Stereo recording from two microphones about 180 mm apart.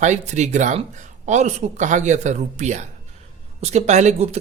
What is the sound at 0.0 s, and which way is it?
Speech, 40° right (ahead or behind).